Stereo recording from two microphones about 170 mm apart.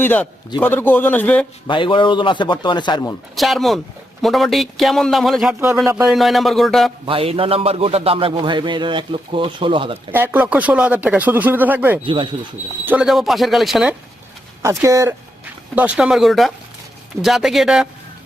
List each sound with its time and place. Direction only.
0.0 s a man's voice: 10° left (ahead or behind)
1.6 s a man's voice: 30° left (ahead or behind)
3.3 s speech: centre (ahead or behind)
5.8 s speech: 15° right (ahead or behind)
6.1 s speech: centre (ahead or behind)
7.0 s a man's voice: 35° right (ahead or behind)
10.1 s speech: 10° right (ahead or behind)
12.0 s speech: 30° right (ahead or behind)
12.8 s speech: 10° right (ahead or behind)
14.6 s speech: 15° right (ahead or behind)
15.7 s speech: 10° right (ahead or behind)